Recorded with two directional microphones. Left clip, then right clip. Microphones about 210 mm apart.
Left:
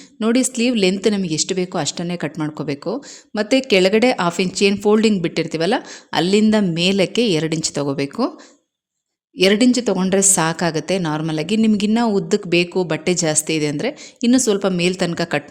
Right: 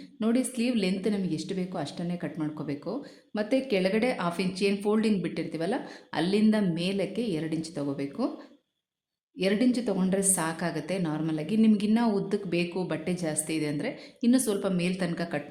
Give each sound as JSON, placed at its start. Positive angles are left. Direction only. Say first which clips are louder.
{"t": 0.2, "sound": "a woman's voice", "louder": "left 10 dB", "side_deg": 35}
{"t": 9.4, "sound": "a woman's voice", "louder": "left 12 dB", "side_deg": 40}